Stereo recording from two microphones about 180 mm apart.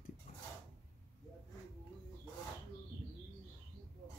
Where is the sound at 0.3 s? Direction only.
40° left (ahead or behind).